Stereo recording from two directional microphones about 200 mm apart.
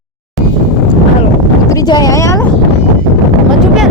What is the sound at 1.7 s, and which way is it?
Boat, 20° left (ahead or behind).